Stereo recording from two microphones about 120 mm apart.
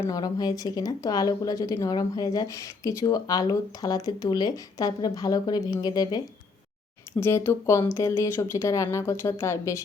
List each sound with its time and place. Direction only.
0.1 s speech: 35° left (ahead or behind)
7.2 s speech: 20° left (ahead or behind)